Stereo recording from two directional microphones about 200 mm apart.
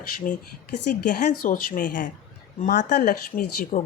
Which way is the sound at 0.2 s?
40° left (ahead or behind).